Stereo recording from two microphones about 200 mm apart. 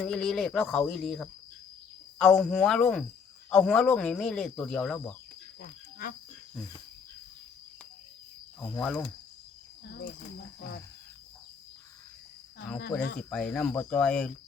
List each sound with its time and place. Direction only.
0.0 s speech: 5° left (ahead or behind)
5.5 s cricket: 50° left (ahead or behind)
8.7 s speech: 10° left (ahead or behind)
13.3 s speech: 5° left (ahead or behind)